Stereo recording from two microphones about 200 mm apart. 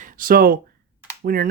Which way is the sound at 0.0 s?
45° right (ahead or behind).